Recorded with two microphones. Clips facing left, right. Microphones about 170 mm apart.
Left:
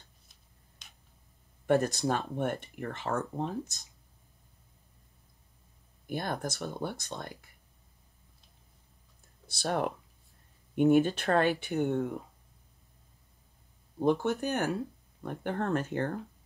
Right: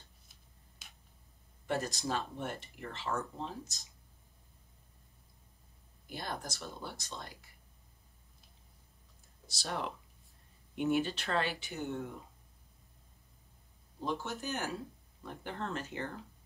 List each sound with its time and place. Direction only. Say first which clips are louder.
0.8 s tick-tock: even; 5° right (ahead or behind)
1.7 s speech: left 8 dB; 55° left (ahead or behind)
6.0 s speech: left 7 dB; 55° left (ahead or behind)
9.5 s speech: left 8 dB; 55° left (ahead or behind)
13.9 s speech: left 10 dB; 55° left (ahead or behind)